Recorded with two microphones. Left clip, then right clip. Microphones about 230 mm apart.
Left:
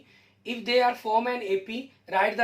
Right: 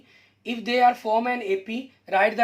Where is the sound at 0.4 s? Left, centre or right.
Right.